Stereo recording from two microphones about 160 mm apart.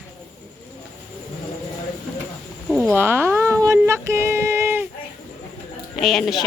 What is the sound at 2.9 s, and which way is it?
Speech, 15° right (ahead or behind).